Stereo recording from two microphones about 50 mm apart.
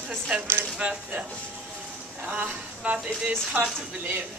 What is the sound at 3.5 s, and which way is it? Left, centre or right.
Speech, right.